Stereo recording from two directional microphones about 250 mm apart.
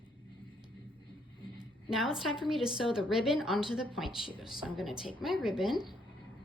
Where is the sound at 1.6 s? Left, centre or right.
Centre.